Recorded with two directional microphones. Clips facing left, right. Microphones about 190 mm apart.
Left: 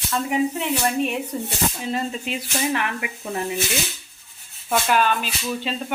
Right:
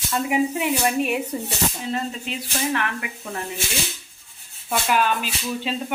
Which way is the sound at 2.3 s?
15° left (ahead or behind).